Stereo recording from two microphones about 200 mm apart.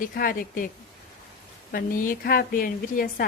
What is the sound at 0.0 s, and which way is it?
Speech, 45° left (ahead or behind).